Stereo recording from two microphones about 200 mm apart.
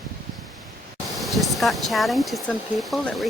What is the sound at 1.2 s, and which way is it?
Speech, centre (ahead or behind).